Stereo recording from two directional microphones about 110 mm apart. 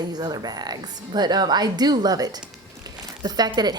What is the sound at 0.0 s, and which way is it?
A woman's voice, 40° right (ahead or behind).